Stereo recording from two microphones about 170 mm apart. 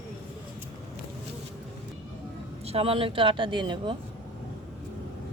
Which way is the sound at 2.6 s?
35° right (ahead or behind).